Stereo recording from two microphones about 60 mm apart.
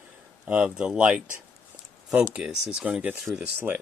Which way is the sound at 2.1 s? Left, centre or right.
Right.